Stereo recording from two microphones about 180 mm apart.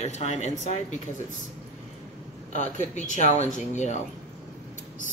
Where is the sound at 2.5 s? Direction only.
40° left (ahead or behind).